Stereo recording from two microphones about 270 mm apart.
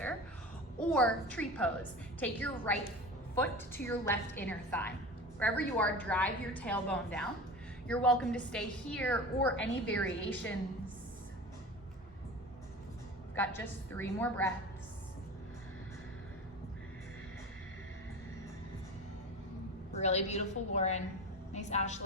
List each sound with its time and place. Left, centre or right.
0.8 s a woman's voice: centre
13.3 s a woman's voice: centre
20.0 s a woman's voice: left